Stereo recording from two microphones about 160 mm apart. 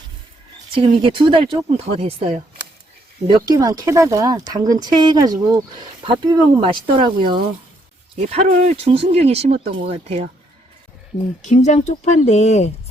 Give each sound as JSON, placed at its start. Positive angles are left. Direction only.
{"t": 0.7, "sound": "speech", "side_deg": -30}
{"t": 3.2, "sound": "speech", "side_deg": -25}
{"t": 8.4, "sound": "speech", "side_deg": -60}
{"t": 8.7, "sound": "speech", "side_deg": -40}
{"t": 11.4, "sound": "a woman's voice", "side_deg": 50}